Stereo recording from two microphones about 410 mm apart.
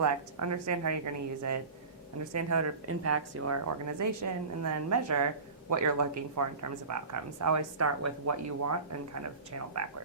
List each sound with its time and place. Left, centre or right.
0.0 s a woman's voice: right